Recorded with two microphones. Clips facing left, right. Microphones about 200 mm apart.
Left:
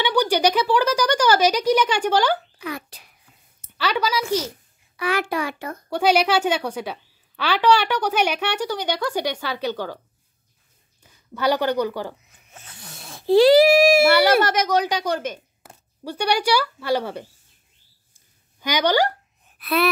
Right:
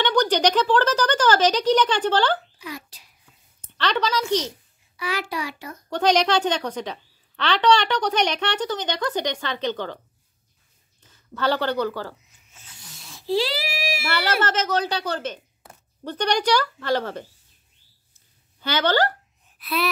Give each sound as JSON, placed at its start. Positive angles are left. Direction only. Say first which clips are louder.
{"t": 0.0, "sound": "speech", "louder": "left 1 dB", "side_deg": 10}
{"t": 2.6, "sound": "a sound", "louder": "left 5 dB", "side_deg": 60}
{"t": 3.6, "sound": "a woman's voice", "louder": "left 1 dB", "side_deg": 10}
{"t": 4.9, "sound": "a child's voice", "louder": "left 5 dB", "side_deg": 55}
{"t": 5.9, "sound": "a woman's voice", "louder": "left 1 dB", "side_deg": 10}
{"t": 11.0, "sound": "speech", "louder": "left 1 dB", "side_deg": 10}
{"t": 12.3, "sound": "a sound", "louder": "left 7 dB", "side_deg": 55}
{"t": 14.1, "sound": "a woman's voice", "louder": "left 6 dB", "side_deg": 10}
{"t": 18.1, "sound": "a sound", "louder": "left 1 dB", "side_deg": 15}
{"t": 19.6, "sound": "gasp", "louder": "left 5 dB", "side_deg": 60}